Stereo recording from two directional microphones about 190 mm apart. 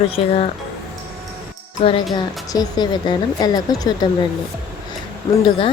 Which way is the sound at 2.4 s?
20° left (ahead or behind).